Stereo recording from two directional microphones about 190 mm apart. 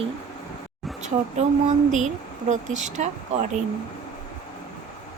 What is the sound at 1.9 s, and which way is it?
Speech, 40° right (ahead or behind).